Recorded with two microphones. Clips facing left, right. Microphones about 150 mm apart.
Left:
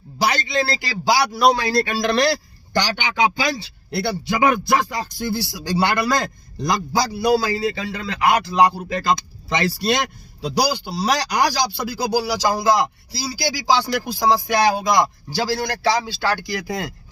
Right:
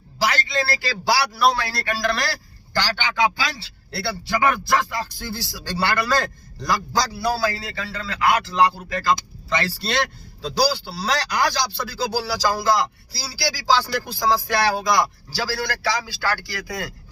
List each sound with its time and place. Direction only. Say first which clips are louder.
0.2 s a man's voice: left 2 dB; 15° left (ahead or behind)